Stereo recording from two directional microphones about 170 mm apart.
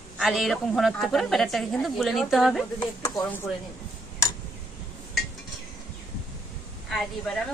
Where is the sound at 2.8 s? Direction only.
25° left (ahead or behind).